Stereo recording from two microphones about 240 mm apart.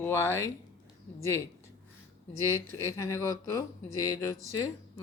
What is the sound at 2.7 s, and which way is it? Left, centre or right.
Speech, centre.